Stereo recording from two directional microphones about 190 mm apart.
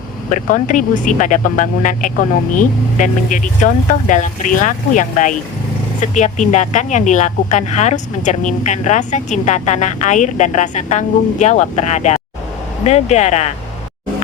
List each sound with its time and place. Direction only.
0.3 s speech: 45° left (ahead or behind)